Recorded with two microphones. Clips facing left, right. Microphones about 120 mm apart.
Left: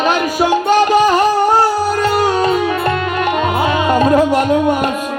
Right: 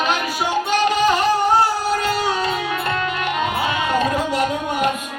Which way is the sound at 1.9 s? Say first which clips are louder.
Left 6 dB; 50° left (ahead or behind).